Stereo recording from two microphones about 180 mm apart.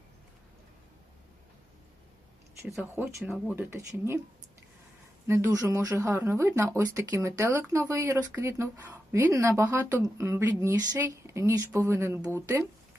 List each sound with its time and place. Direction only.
2.9 s speech: 15° right (ahead or behind)
5.3 s speech: 15° right (ahead or behind)